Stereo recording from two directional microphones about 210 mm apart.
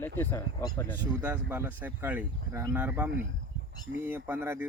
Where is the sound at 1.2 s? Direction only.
10° right (ahead or behind).